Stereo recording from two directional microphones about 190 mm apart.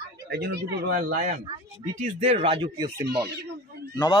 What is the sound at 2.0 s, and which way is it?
Speech, 35° right (ahead or behind).